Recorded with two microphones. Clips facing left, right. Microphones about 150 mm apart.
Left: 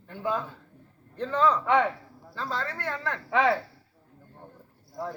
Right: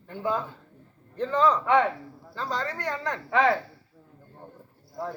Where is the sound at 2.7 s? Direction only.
15° right (ahead or behind).